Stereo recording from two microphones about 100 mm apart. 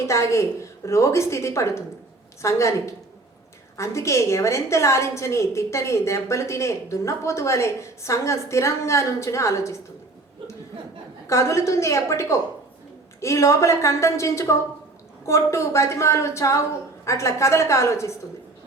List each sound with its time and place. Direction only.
0.0 s a woman's voice: 30° left (ahead or behind)
11.3 s a woman's voice: 30° left (ahead or behind)